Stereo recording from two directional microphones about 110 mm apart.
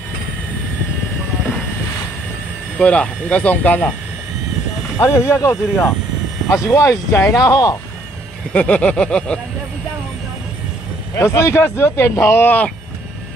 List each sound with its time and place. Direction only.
2.8 s speech: 10° left (ahead or behind)
4.9 s speech: 25° left (ahead or behind)
8.5 s speech: 10° left (ahead or behind)
11.1 s speech: 25° left (ahead or behind)